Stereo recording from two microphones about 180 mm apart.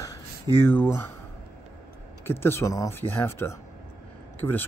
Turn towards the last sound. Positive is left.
turn(degrees=10)  # may be behind; listen again after turning